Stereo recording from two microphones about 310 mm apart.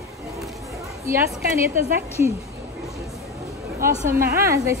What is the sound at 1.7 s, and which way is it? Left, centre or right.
Speech, right.